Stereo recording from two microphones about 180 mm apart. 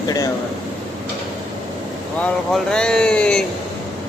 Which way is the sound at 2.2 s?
5° left (ahead or behind).